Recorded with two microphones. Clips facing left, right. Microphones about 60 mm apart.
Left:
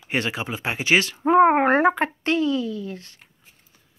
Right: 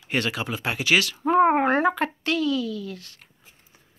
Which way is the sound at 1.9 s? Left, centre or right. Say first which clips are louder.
Left 3 dB; left.